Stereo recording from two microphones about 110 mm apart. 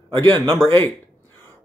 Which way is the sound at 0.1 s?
45° right (ahead or behind).